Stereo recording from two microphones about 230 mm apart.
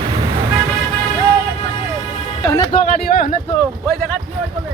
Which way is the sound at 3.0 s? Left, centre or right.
Left.